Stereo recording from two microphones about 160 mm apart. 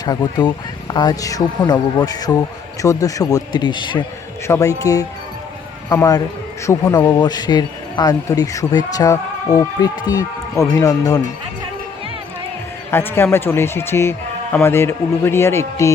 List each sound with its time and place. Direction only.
0.0 s a man's voice: 25° left (ahead or behind)
4.4 s a man's voice: 15° left (ahead or behind)
12.9 s a man's voice: 15° left (ahead or behind)